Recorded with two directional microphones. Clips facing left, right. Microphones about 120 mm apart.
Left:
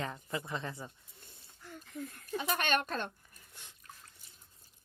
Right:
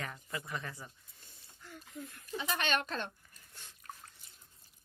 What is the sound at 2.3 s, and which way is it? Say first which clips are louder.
Speech: left 2 dB; 50° left (ahead or behind).